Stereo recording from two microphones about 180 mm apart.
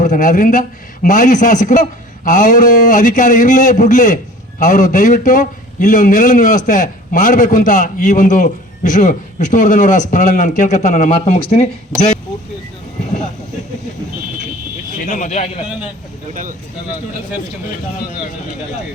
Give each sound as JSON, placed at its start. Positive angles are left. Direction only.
{"t": 0.0, "sound": "a man's voice", "side_deg": 45}
{"t": 15.1, "sound": "speech", "side_deg": 40}
{"t": 16.3, "sound": "speech", "side_deg": -50}